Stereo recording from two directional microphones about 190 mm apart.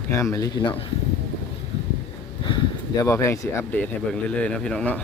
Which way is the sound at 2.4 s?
25° left (ahead or behind).